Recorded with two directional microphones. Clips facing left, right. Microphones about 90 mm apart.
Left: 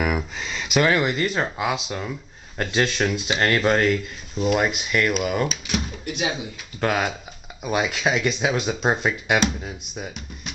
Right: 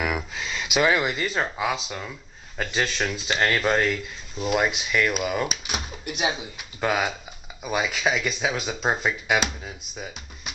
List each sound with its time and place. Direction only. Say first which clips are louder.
0.0 s speech: left 3 dB; centre (ahead or behind)
5.7 s speech: left 4 dB; 15° right (ahead or behind)
6.8 s speech: left 1 dB; 5° right (ahead or behind)